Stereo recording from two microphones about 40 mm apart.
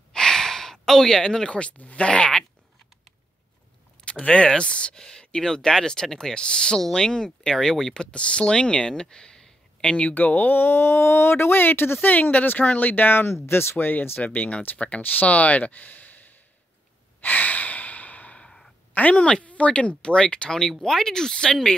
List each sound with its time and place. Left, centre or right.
0.1 s gasp: centre
2.0 s speech: left
4.0 s a sound: left
4.5 s speech: left
4.9 s speech: centre
8.0 s speech: left
10.1 s speech: left
10.5 s speech: left
14.2 s speech: left
17.2 s breathing: left
18.4 s sigh: centre
18.9 s speech: left
20.8 s speech: centre